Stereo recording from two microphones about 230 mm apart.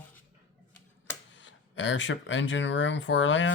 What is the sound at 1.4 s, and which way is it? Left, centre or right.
Speech, left.